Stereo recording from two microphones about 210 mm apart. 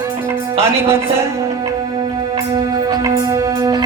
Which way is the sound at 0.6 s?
10° right (ahead or behind).